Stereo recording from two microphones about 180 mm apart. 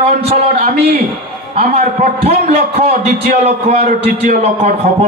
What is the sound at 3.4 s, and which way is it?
Speech, 40° right (ahead or behind).